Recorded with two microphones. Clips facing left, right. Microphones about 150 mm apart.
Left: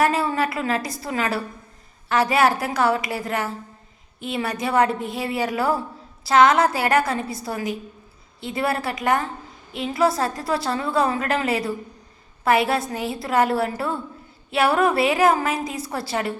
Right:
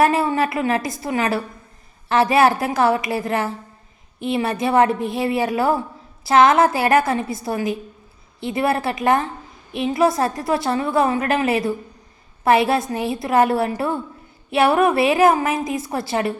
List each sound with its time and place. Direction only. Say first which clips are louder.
0.0 s a woman's voice: right 3 dB; 25° right (ahead or behind)